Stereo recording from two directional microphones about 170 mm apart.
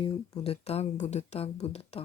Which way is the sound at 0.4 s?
40° left (ahead or behind).